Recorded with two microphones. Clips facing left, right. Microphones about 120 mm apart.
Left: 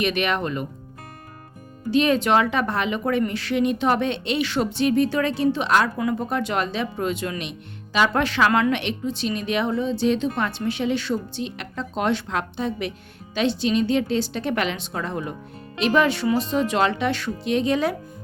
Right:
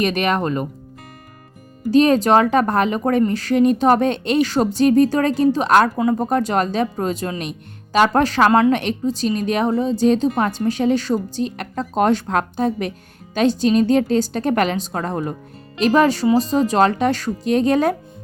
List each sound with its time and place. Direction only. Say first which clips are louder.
0.0 s speech: right 4 dB; 40° right (ahead or behind)
1.9 s a woman's voice: right 5 dB; 40° right (ahead or behind)